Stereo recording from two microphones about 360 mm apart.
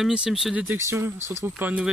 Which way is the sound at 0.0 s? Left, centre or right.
Centre.